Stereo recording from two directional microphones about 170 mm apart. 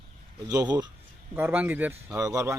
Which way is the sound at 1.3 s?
10° right (ahead or behind).